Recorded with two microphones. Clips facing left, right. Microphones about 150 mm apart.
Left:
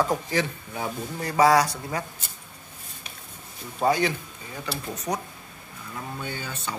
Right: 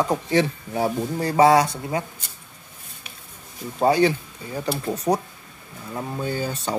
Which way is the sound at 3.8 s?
30° right (ahead or behind).